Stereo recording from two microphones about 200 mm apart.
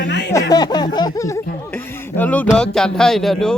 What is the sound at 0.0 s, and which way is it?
Speech, 60° left (ahead or behind).